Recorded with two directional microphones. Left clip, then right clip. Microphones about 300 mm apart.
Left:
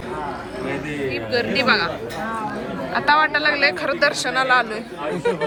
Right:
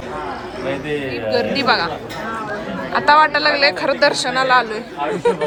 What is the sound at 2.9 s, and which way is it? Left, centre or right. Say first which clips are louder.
Speech: right 4 dB; centre.